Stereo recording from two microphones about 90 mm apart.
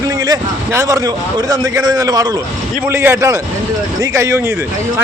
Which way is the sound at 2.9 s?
30° right (ahead or behind).